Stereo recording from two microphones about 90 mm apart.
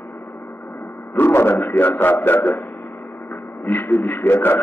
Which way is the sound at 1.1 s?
25° left (ahead or behind).